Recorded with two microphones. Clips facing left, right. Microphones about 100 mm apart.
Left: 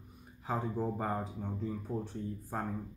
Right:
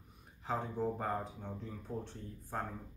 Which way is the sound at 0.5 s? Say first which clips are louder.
Left 2 dB; 5° left (ahead or behind).